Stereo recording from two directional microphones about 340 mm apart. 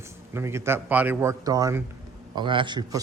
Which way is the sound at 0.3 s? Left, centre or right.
Centre.